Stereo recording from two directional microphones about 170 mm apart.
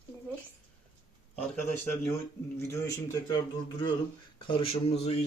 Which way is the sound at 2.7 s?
20° left (ahead or behind).